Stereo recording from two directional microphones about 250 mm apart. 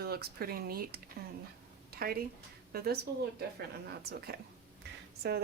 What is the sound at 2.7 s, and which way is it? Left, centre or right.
Speech, right.